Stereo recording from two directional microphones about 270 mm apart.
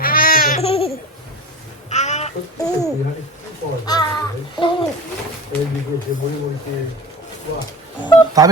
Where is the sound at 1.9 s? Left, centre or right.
Left.